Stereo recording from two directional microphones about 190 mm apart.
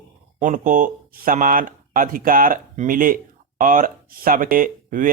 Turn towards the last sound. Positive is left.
turn(degrees=-45)  # may be behind; listen again after turning